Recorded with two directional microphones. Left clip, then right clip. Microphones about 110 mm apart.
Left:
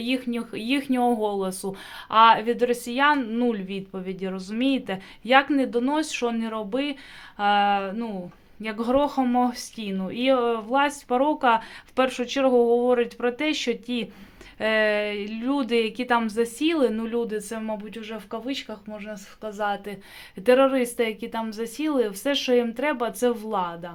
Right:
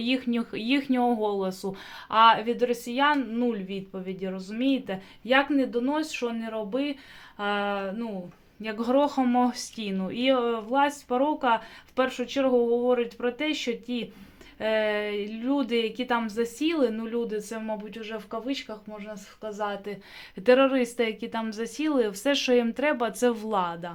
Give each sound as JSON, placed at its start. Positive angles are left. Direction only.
{"t": 0.0, "sound": "a woman's voice", "side_deg": 0}